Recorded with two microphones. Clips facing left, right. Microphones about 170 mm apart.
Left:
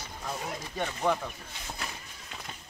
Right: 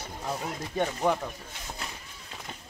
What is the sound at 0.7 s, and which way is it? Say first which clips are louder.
Speech: right 3 dB; 15° right (ahead or behind).